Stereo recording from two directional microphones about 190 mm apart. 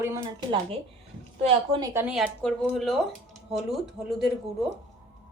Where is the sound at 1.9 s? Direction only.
5° right (ahead or behind).